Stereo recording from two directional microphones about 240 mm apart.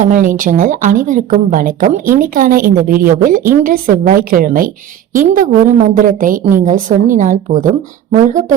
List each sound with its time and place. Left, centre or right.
0.0 s a woman's voice: right